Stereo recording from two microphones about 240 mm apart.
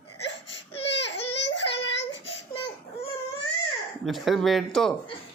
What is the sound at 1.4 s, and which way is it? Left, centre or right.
Child singing, left.